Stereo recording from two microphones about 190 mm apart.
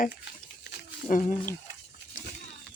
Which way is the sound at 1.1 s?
45° left (ahead or behind).